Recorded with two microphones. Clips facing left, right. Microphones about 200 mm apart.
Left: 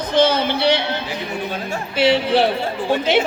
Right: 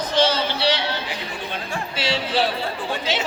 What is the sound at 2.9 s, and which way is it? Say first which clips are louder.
Speech: left 11 dB; 55° left (ahead or behind).